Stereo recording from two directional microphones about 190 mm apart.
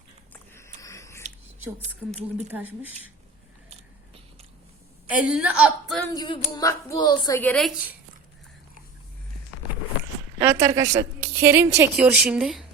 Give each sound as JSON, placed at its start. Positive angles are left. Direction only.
{"t": 0.5, "sound": "a sound", "side_deg": 15}
{"t": 2.5, "sound": "a woman's voice", "side_deg": -10}
{"t": 3.7, "sound": "biting", "side_deg": -35}
{"t": 5.1, "sound": "a woman's voice", "side_deg": -5}
{"t": 6.1, "sound": "a woman's voice", "side_deg": 25}
{"t": 7.3, "sound": "a woman's voice", "side_deg": 5}
{"t": 10.4, "sound": "a woman's voice", "side_deg": -15}